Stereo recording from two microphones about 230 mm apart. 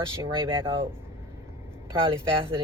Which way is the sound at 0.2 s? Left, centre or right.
Right.